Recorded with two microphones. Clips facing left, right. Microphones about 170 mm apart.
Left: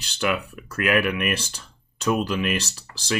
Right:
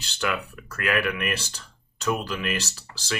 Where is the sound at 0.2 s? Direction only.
15° left (ahead or behind).